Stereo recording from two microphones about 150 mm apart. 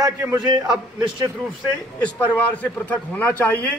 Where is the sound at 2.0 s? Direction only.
10° left (ahead or behind).